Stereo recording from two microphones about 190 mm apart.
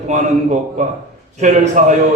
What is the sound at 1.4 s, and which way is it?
Speech, 40° right (ahead or behind).